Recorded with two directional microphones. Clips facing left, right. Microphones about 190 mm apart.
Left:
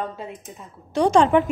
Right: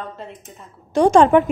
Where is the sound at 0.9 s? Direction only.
50° right (ahead or behind).